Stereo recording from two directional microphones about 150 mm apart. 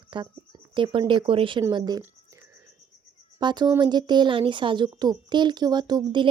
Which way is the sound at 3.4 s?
30° right (ahead or behind).